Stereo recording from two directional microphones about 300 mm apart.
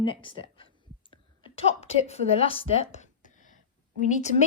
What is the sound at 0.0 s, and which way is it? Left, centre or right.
Speech, centre.